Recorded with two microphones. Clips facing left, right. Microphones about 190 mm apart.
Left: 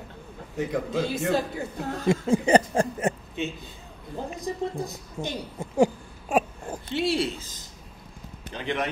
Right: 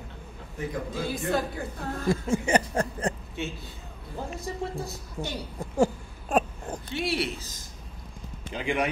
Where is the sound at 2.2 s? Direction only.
35° left (ahead or behind); by 6.8 s 10° left (ahead or behind).